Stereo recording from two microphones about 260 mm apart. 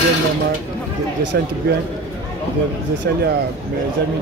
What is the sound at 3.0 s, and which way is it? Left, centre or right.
Speech, right.